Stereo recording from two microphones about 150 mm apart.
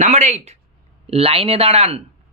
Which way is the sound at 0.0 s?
50° right (ahead or behind).